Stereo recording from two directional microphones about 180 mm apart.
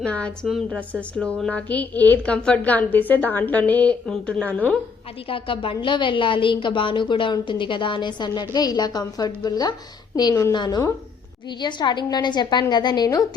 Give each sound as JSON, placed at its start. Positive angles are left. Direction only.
{"t": 0.0, "sound": "a woman's voice", "side_deg": 5}
{"t": 5.3, "sound": "a woman's voice", "side_deg": 30}